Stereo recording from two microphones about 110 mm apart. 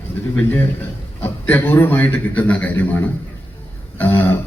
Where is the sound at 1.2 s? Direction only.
20° left (ahead or behind).